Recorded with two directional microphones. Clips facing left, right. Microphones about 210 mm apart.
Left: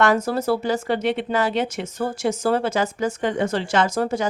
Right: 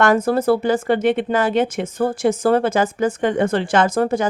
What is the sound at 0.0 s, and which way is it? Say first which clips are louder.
Speech: right 4 dB; 50° right (ahead or behind).